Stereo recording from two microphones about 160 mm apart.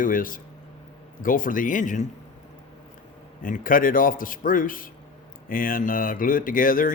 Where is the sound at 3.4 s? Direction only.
60° left (ahead or behind).